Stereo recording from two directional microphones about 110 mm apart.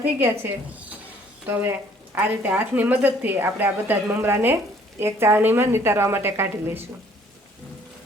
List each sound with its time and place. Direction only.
0.0 s a woman's voice: 20° right (ahead or behind)